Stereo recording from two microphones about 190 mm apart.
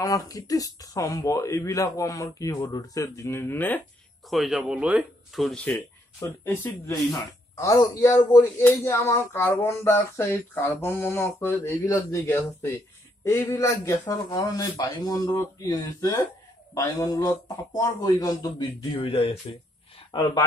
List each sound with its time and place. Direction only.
0.0 s speech: 20° left (ahead or behind)
4.3 s speech: centre (ahead or behind)
6.1 s a man's voice: 15° left (ahead or behind)